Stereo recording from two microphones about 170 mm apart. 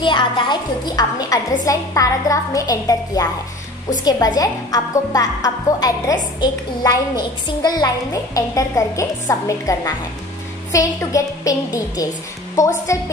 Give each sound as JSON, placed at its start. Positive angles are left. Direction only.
{"t": 0.0, "sound": "a woman's voice", "side_deg": 25}